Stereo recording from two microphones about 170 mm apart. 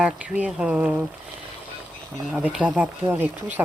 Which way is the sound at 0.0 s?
5° right (ahead or behind).